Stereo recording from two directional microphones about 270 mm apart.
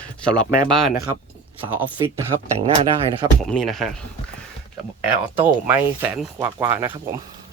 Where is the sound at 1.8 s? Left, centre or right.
Centre.